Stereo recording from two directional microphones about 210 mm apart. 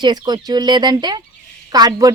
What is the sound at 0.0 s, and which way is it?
Speech, 20° right (ahead or behind).